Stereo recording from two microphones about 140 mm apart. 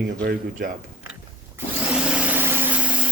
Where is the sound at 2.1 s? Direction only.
10° right (ahead or behind).